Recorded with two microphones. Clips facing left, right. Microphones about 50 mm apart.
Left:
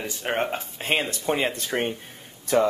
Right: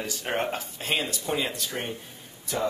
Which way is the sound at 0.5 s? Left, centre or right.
Left.